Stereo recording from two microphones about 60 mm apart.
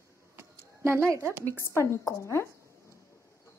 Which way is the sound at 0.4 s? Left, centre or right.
Right.